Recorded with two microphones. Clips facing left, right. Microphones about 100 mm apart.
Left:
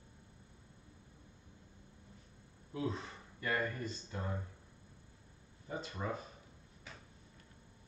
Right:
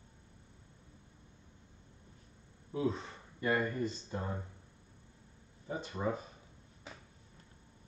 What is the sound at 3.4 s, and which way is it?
Speech, 20° right (ahead or behind).